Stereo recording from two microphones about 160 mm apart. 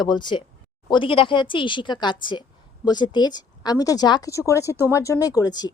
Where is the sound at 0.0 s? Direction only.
25° left (ahead or behind).